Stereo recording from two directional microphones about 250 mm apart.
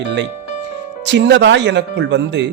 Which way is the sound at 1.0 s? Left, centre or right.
Right.